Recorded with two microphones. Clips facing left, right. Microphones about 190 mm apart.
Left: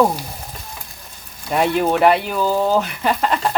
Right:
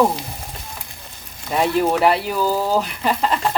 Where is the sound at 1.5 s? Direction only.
Centre (ahead or behind).